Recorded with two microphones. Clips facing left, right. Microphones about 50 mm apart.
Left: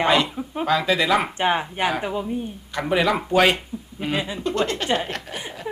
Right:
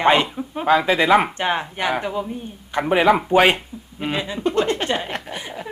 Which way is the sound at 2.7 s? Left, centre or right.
Right.